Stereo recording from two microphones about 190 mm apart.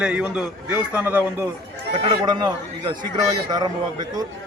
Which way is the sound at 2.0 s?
25° right (ahead or behind).